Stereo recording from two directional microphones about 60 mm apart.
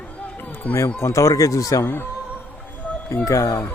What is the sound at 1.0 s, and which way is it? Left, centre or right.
Speech, left.